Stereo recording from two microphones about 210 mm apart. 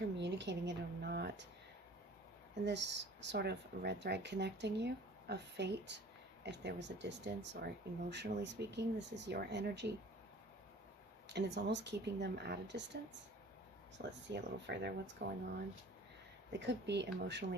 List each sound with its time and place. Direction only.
0.2 s speech: 55° right (ahead or behind)
2.6 s speech: 55° right (ahead or behind)
11.3 s speech: 55° right (ahead or behind)
14.3 s speech: 55° right (ahead or behind)
16.5 s speech: 55° right (ahead or behind)